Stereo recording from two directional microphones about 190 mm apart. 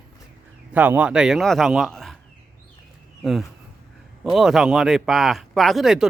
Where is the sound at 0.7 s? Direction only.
10° right (ahead or behind).